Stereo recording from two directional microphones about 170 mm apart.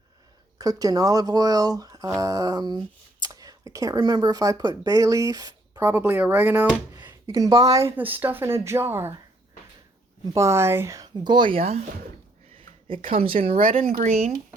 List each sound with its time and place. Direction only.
0.6 s speech: 20° right (ahead or behind)
5.9 s speech: 10° right (ahead or behind)
10.3 s speech: 15° right (ahead or behind); by 11.9 s 35° right (ahead or behind)
13.1 s speech: 30° right (ahead or behind)
13.8 s speech: 55° right (ahead or behind)